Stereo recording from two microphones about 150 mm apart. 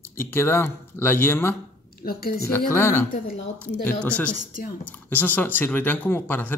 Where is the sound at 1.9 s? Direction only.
85° left.